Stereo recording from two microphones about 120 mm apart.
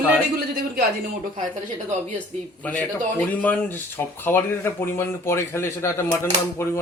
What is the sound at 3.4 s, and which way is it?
Speech, 15° left (ahead or behind).